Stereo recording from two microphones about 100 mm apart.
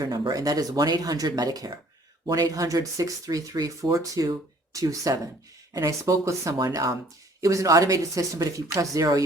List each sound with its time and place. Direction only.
0.0 s speech: 40° right (ahead or behind)